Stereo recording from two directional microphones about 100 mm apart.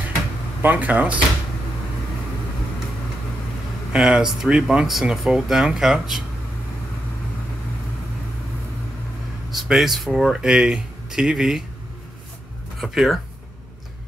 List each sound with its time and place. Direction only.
0.6 s speech: 15° right (ahead or behind)
3.9 s speech: 10° right (ahead or behind)
9.5 s speech: centre (ahead or behind)
12.8 s speech: 5° right (ahead or behind)